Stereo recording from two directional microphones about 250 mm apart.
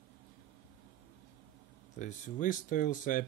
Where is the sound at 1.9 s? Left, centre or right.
Left.